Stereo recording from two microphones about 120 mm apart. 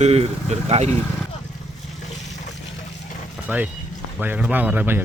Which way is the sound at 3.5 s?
15° right (ahead or behind).